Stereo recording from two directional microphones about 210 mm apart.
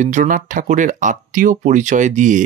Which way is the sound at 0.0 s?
35° right (ahead or behind).